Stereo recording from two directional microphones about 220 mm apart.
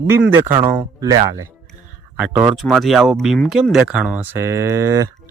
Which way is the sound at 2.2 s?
5° right (ahead or behind).